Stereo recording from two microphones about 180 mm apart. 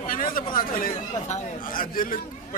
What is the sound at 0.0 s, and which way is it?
Speech, 50° left (ahead or behind).